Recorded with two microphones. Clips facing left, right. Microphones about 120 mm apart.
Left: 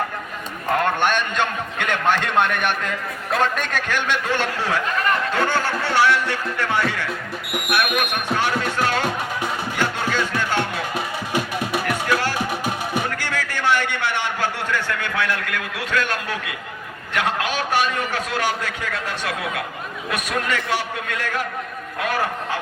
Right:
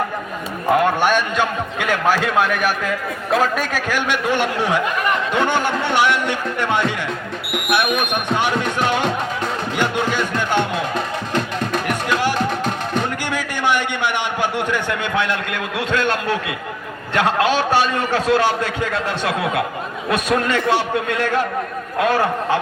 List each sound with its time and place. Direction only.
0.7 s a man's voice: 10° right (ahead or behind)
9.7 s music: 15° right (ahead or behind)
10.9 s music: 10° left (ahead or behind)
13.2 s a sound: 15° right (ahead or behind)
17.2 s a man's voice: 30° right (ahead or behind)